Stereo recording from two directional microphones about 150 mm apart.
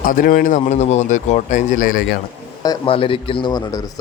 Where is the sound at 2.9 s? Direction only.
35° left (ahead or behind).